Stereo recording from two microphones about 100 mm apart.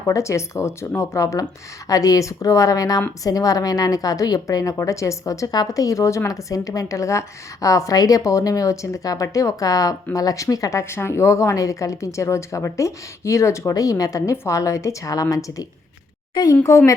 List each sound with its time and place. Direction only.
0.0 s a woman's voice: 30° left (ahead or behind)
16.3 s speech: 45° left (ahead or behind)
16.6 s a woman's voice: 30° left (ahead or behind)